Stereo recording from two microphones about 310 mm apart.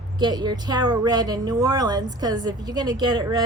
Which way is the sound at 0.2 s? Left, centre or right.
Centre.